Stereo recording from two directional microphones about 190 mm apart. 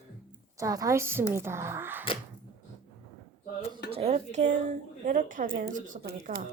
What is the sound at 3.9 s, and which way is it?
A woman's voice, 30° right (ahead or behind).